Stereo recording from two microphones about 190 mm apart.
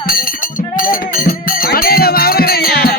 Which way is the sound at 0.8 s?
45° left (ahead or behind).